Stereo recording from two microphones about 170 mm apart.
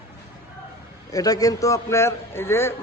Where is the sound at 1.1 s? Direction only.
20° left (ahead or behind).